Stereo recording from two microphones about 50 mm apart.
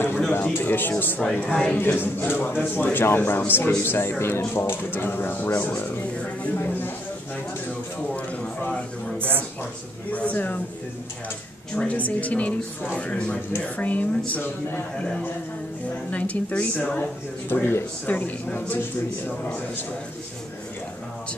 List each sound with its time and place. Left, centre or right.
0.3 s speech: left
1.2 s speech: left
1.8 s speech: left
10.1 s speech: left
11.7 s speech: centre; by 14.8 s left
16.1 s speech: left
17.5 s speech: left
18.0 s speech: left